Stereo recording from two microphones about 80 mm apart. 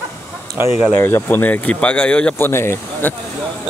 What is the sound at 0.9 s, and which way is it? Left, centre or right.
Speech, left.